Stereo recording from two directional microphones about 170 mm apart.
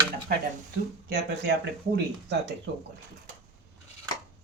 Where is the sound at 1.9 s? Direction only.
80° right.